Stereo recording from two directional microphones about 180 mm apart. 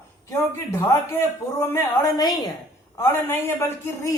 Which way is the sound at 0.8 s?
15° left (ahead or behind).